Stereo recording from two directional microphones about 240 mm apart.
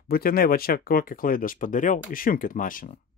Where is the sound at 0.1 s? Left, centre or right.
Left.